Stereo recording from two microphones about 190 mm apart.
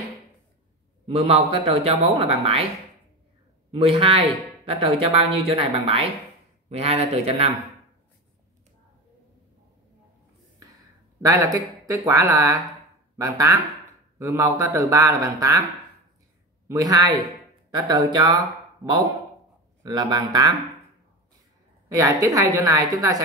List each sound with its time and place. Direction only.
1.0 s a man's voice: 30° right (ahead or behind)
3.7 s a man's voice: 30° right (ahead or behind)
11.2 s a man's voice: 15° right (ahead or behind)
16.6 s speech: 20° right (ahead or behind)
19.8 s speech: 20° right (ahead or behind)
21.8 s a man's voice: 15° right (ahead or behind)